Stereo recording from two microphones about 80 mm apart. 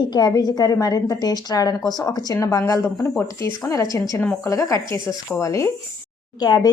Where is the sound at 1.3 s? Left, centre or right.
Left.